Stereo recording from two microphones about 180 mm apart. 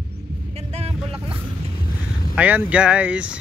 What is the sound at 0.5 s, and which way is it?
Vehicle, 35° right (ahead or behind).